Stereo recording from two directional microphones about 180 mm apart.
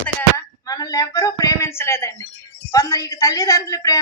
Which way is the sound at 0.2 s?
20° left (ahead or behind).